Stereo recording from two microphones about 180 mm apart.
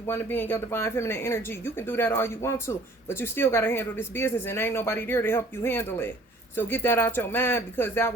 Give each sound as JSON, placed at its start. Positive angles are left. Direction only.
{"t": 0.1, "sound": "speech", "side_deg": 10}